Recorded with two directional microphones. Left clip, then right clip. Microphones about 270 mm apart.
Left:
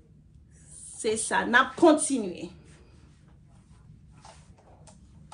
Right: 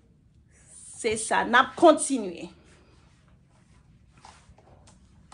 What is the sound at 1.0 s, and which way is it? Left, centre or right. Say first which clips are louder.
A woman's voice: right 1 dB; right.